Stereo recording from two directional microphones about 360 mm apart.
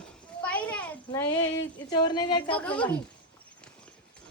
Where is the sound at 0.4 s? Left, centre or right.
Centre.